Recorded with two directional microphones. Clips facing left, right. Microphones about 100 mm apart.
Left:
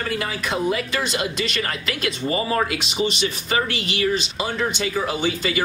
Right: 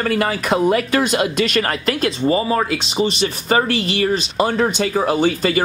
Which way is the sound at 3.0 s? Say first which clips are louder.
Right 4 dB; 40° right (ahead or behind).